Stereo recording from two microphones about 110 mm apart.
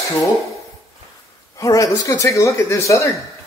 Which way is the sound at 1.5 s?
30° left (ahead or behind).